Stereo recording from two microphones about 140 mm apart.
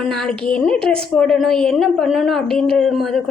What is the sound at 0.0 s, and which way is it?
A woman's voice, 5° left (ahead or behind).